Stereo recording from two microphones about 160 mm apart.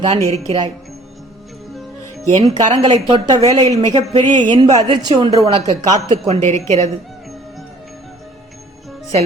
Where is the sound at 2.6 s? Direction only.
45° right (ahead or behind).